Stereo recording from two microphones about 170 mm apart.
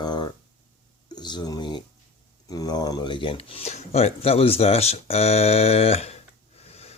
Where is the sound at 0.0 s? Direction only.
25° left (ahead or behind).